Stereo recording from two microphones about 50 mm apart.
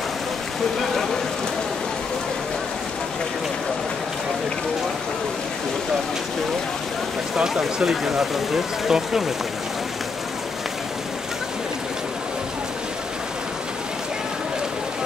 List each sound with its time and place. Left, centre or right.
7.3 s speech: centre